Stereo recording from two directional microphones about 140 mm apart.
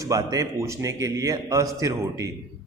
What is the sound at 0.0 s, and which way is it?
A man's voice, 25° right (ahead or behind).